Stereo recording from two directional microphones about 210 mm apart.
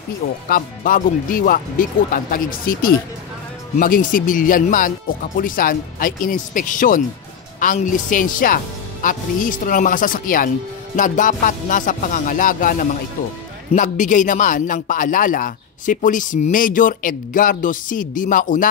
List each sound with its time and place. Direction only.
0.5 s a man's voice: 40° left (ahead or behind)